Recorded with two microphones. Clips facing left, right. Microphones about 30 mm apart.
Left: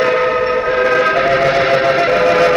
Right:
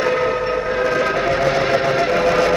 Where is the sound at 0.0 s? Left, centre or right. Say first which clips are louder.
Left 4 dB; left.